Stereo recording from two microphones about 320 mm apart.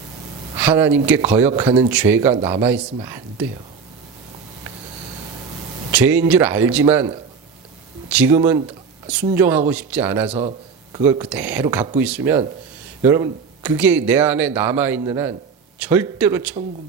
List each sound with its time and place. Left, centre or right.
0.5 s speech: centre
5.9 s speech: centre
10.2 s a man's voice: centre